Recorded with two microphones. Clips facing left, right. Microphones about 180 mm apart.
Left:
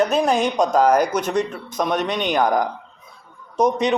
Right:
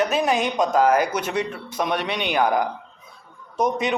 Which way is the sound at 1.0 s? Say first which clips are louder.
Left 3 dB; 10° right (ahead or behind).